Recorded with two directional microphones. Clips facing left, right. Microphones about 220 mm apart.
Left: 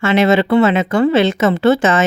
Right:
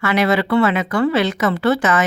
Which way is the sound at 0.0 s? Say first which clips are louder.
Left 4 dB; 25° left (ahead or behind).